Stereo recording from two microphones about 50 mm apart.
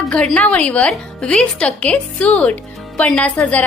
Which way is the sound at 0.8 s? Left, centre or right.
Centre.